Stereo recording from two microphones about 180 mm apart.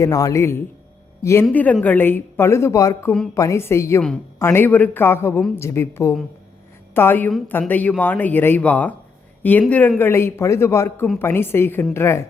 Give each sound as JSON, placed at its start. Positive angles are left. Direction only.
{"t": 0.0, "sound": "speech", "side_deg": 20}